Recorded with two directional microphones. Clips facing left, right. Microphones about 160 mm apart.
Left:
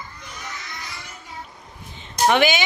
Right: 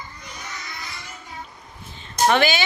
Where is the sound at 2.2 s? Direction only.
15° left (ahead or behind).